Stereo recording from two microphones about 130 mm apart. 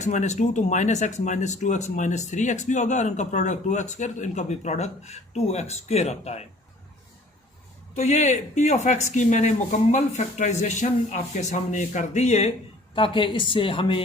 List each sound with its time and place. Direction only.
0.0 s speech: 65° left (ahead or behind)
7.9 s speech: 60° left (ahead or behind)
12.9 s a woman's voice: 40° left (ahead or behind)